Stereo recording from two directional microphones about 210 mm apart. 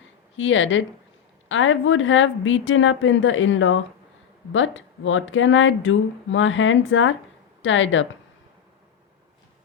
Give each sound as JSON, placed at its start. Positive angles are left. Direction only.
{"t": 0.3, "sound": "speech", "side_deg": 65}